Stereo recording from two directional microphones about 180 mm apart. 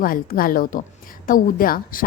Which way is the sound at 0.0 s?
50° left (ahead or behind).